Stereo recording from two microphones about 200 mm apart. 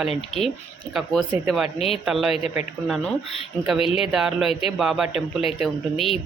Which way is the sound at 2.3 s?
30° left (ahead or behind).